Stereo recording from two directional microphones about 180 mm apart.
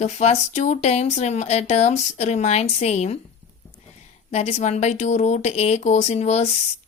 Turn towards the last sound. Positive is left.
turn(degrees=40)  # may be behind; listen again after turning